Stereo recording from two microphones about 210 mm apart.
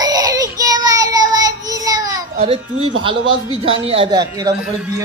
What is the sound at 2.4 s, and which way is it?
A man's voice, 25° right (ahead or behind).